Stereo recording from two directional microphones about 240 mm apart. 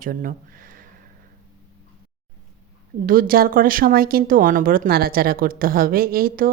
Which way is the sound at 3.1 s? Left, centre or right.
Right.